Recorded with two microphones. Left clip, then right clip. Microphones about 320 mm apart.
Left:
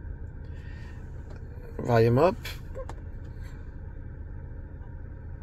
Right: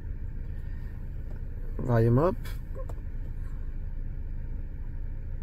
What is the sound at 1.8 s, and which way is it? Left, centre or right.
Speech, left.